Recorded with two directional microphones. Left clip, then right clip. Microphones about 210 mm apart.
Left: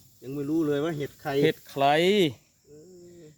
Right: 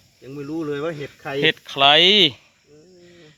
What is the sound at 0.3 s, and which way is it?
Speech, 35° left (ahead or behind).